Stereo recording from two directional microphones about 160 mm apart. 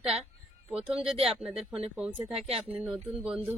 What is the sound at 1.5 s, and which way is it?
Speech, 40° right (ahead or behind).